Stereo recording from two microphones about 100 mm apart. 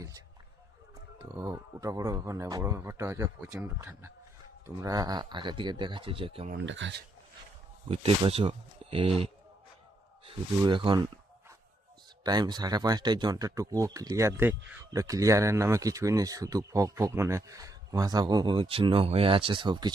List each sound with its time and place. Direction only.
1.2 s speech: 35° right (ahead or behind)
4.6 s speech: 35° right (ahead or behind); by 6.5 s 65° right (ahead or behind)
8.3 s speech: 70° right (ahead or behind)
10.7 s speech: 55° right (ahead or behind)
12.2 s speech: 45° right (ahead or behind); by 14.8 s 25° right (ahead or behind)
14.9 s speech: 35° right (ahead or behind); by 19.9 s 50° right (ahead or behind)